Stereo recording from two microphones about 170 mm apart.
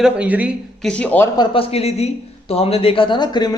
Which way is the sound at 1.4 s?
35° left (ahead or behind).